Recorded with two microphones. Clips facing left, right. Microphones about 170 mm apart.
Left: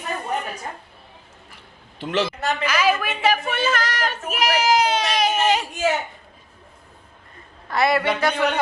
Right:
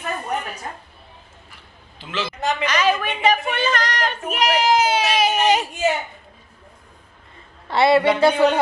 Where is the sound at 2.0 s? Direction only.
65° left (ahead or behind).